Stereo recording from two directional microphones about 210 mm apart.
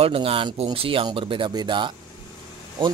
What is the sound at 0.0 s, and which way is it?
Speech, 25° right (ahead or behind).